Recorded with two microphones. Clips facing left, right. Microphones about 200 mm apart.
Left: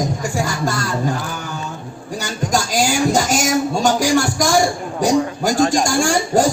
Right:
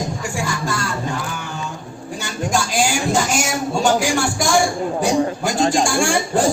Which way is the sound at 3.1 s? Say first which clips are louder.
Left 2 dB; 40° left (ahead or behind).